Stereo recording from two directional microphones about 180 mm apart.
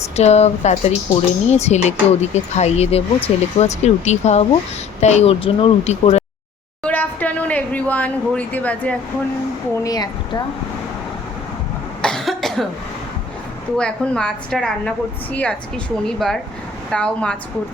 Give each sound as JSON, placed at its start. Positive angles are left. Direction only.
{"t": 0.2, "sound": "speech", "side_deg": 35}
{"t": 6.8, "sound": "speech", "side_deg": 10}
{"t": 9.8, "sound": "speech", "side_deg": 20}
{"t": 12.0, "sound": "cough", "side_deg": 0}
{"t": 13.7, "sound": "a woman's voice", "side_deg": 5}